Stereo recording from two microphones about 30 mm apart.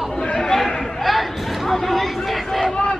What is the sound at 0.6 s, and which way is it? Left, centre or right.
Chatter, left.